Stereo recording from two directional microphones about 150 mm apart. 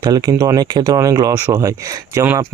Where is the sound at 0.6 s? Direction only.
30° right (ahead or behind).